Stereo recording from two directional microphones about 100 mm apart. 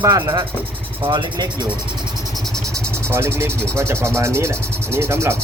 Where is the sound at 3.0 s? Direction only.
25° right (ahead or behind).